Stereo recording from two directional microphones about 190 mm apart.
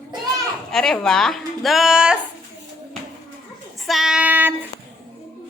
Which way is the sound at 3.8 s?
Centre (ahead or behind).